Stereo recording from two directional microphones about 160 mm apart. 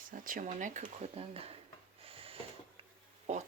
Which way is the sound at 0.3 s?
55° right (ahead or behind).